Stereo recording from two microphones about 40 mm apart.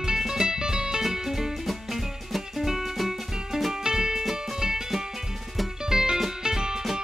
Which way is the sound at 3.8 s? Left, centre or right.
Centre.